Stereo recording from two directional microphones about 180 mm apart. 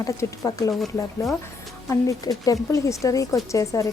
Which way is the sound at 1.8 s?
20° left (ahead or behind).